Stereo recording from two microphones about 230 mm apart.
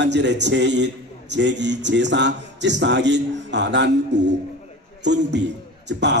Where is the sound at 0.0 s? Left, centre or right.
Right.